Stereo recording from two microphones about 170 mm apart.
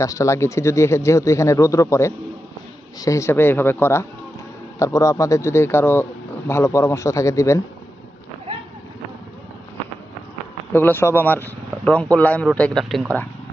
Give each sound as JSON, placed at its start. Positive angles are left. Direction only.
{"t": 0.0, "sound": "a man's voice", "side_deg": 20}
{"t": 10.7, "sound": "a man's voice", "side_deg": 10}